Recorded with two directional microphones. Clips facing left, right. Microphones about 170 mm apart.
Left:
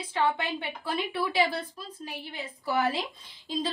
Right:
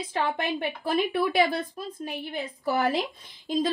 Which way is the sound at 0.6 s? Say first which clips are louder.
Right 6 dB; 50° right (ahead or behind).